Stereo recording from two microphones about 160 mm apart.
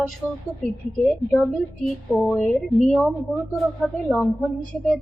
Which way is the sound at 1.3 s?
Centre (ahead or behind).